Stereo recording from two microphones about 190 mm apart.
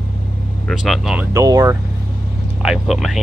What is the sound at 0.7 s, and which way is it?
Speech, 5° right (ahead or behind).